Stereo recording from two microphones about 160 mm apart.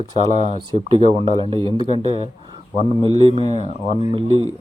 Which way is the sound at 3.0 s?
35° right (ahead or behind).